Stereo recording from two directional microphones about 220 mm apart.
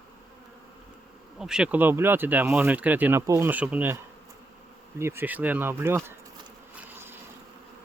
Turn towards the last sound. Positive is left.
turn(degrees=-10)  # may be behind; listen again after turning